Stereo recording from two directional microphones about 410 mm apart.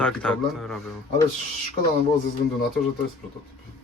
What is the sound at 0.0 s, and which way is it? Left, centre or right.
Speech, centre.